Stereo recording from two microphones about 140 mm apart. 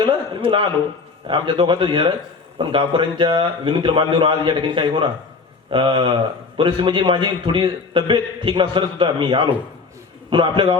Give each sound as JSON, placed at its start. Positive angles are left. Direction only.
{"t": 0.0, "sound": "a man's voice", "side_deg": -35}